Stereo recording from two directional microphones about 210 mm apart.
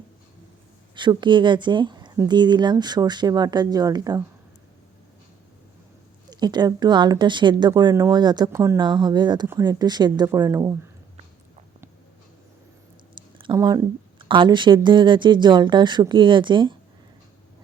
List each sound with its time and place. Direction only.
0.9 s a woman's voice: 20° right (ahead or behind)
6.3 s a woman's voice: 20° right (ahead or behind)
13.4 s a woman's voice: 20° right (ahead or behind)